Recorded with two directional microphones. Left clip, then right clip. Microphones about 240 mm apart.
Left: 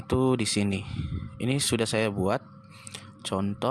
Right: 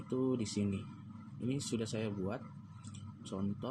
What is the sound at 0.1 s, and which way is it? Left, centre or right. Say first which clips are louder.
Speech: left 11 dB; left.